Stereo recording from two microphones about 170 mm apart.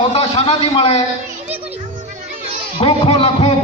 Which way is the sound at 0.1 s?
35° left (ahead or behind).